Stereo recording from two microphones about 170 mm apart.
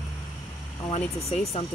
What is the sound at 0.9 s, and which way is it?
Speech, 40° left (ahead or behind).